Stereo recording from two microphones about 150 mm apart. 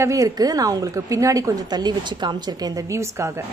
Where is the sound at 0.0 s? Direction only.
20° right (ahead or behind).